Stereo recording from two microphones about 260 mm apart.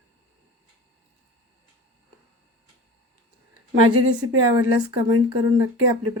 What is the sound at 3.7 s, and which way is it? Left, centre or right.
Speech, right.